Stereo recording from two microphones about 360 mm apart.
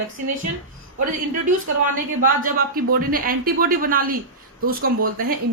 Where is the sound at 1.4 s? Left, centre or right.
Right.